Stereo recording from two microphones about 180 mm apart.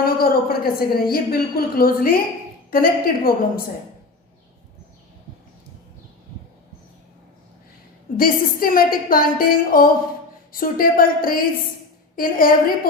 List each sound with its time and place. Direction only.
0.0 s a woman's voice: 55° left (ahead or behind)
8.1 s a woman's voice: 55° left (ahead or behind)